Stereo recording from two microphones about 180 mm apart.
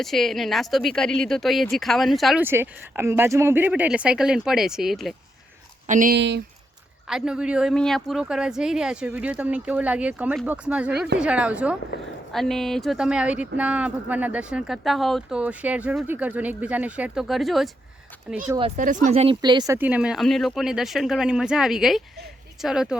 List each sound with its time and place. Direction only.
0.0 s speech: centre (ahead or behind)
2.4 s speech: 10° right (ahead or behind)
5.9 s speech: 45° right (ahead or behind)
6.1 s speech: 75° right (ahead or behind)
7.1 s speech: 5° right (ahead or behind)
18.8 s speech: 45° right (ahead or behind)
19.4 s speech: 25° right (ahead or behind); by 23.0 s 5° right (ahead or behind)